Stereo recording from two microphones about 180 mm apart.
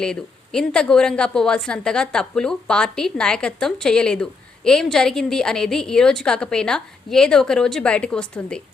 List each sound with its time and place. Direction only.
0.0 s a woman's voice: 5° left (ahead or behind)